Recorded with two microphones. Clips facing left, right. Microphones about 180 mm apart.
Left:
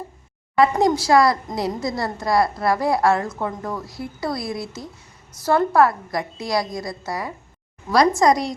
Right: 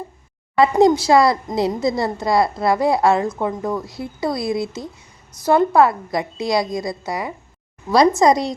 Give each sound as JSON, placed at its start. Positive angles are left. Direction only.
{"t": 0.6, "sound": "a woman's voice", "side_deg": -25}